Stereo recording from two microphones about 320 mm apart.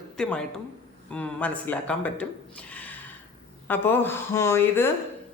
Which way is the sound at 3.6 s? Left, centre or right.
Centre.